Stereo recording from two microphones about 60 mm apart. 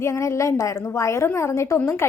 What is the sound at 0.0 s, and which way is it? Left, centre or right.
A woman's voice, left.